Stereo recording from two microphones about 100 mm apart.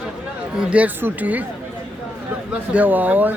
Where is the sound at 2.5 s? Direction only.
15° right (ahead or behind).